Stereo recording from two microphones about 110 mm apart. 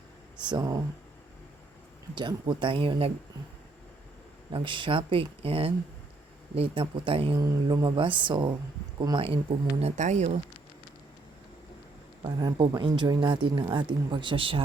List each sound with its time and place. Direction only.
0.3 s speech: 45° right (ahead or behind)
2.1 s speech: 45° right (ahead or behind)
4.5 s speech: 50° right (ahead or behind)
7.3 s speech: 35° right (ahead or behind); by 9.4 s 50° right (ahead or behind)
9.8 s speech: 90° right
12.4 s speech: 35° right (ahead or behind); by 14.6 s 55° right (ahead or behind)